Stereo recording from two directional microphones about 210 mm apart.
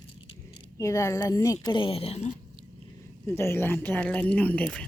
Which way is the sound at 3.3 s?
10° left (ahead or behind).